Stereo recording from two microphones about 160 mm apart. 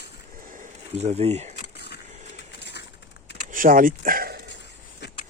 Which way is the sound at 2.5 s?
90° left.